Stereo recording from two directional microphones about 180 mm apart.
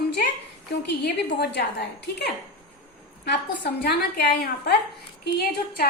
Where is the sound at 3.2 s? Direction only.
65° left (ahead or behind).